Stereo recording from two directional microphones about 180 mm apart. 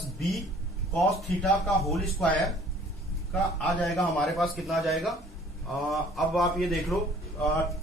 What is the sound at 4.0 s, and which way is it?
Speech, centre (ahead or behind).